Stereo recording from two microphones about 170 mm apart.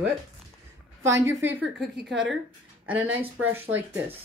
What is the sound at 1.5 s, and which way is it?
A woman's voice, 5° right (ahead or behind).